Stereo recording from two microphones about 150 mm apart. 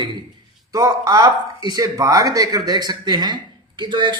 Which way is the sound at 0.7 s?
25° right (ahead or behind).